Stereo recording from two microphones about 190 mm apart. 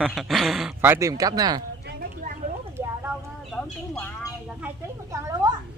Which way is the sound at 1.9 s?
55° right (ahead or behind).